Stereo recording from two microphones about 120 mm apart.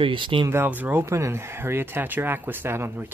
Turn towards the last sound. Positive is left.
turn(degrees=-20)  # may be behind; listen again after turning